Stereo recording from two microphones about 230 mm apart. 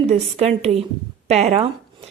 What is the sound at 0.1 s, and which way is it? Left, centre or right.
A woman's voice, right.